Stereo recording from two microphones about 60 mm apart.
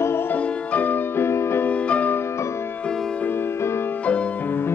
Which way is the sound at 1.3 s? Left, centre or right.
Left.